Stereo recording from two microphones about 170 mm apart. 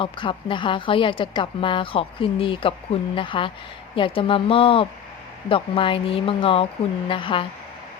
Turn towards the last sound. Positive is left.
turn(degrees=30)  # may be behind; listen again after turning